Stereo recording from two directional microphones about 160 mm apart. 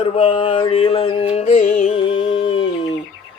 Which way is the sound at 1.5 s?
50° left (ahead or behind).